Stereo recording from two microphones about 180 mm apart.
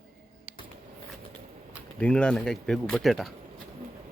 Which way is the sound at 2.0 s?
5° left (ahead or behind).